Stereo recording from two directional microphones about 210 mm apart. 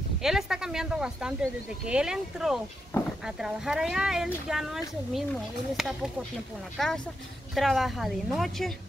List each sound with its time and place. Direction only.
0.2 s speech: centre (ahead or behind)